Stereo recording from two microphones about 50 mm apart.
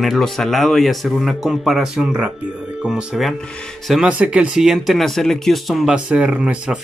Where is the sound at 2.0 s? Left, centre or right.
Right.